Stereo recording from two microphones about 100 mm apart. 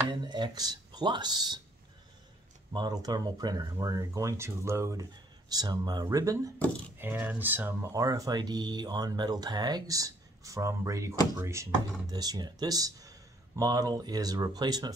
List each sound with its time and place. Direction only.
0.2 s speech: 45° right (ahead or behind)
2.7 s speech: 45° right (ahead or behind)
5.5 s speech: 40° right (ahead or behind)
7.0 s speech: 20° right (ahead or behind)
7.9 s speech: 35° right (ahead or behind)
12.1 s speech: 40° right (ahead or behind)